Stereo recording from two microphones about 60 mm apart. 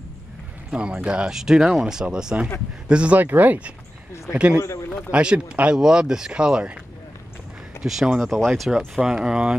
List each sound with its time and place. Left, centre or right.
0.7 s speech: centre
3.2 s speech: right; by 6.8 s centre
7.8 s speech: centre
8.2 s speech: centre